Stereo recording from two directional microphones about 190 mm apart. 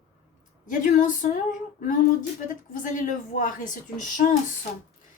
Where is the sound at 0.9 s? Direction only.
40° left (ahead or behind).